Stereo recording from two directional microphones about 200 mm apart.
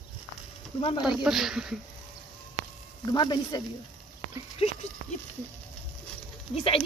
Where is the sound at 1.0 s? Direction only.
Centre (ahead or behind).